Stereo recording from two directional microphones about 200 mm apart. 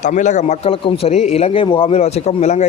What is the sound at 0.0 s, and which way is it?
A man's voice, 40° left (ahead or behind).